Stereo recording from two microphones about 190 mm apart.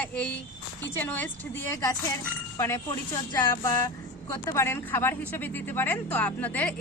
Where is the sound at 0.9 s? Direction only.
10° left (ahead or behind).